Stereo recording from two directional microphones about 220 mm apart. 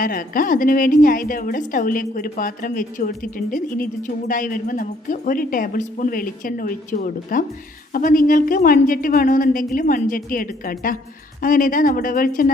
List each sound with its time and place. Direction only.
0.0 s a woman's voice: 40° left (ahead or behind)